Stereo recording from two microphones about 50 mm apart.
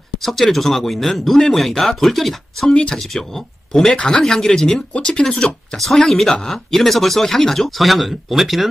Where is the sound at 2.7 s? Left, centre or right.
Centre.